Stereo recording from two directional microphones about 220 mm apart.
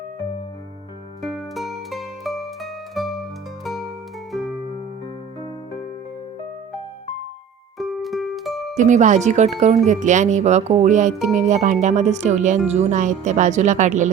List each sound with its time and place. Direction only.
1.2 s music: centre (ahead or behind)
4.3 s music: centre (ahead or behind)
7.8 s music: centre (ahead or behind)
8.7 s speech: 35° right (ahead or behind)